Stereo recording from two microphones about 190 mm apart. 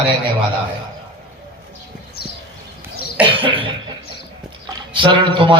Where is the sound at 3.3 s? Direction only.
25° right (ahead or behind).